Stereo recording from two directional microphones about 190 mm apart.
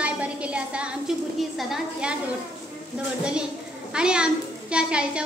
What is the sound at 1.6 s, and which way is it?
Speech, 5° right (ahead or behind).